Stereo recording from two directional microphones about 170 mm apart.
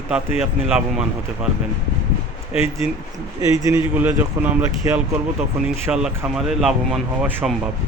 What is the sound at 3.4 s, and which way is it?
Speech, 20° right (ahead or behind).